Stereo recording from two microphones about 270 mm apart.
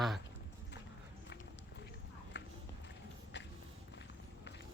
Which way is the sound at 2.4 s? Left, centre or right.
Left.